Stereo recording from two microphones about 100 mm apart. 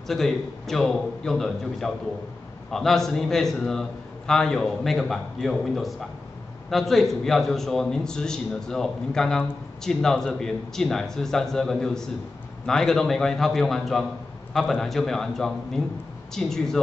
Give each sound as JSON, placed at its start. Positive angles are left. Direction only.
{"t": 0.1, "sound": "a man's voice", "side_deg": 5}